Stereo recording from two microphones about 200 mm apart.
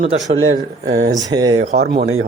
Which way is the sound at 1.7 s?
55° right (ahead or behind).